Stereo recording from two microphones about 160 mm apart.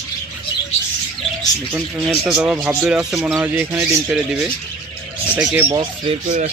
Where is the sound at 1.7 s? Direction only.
Centre (ahead or behind).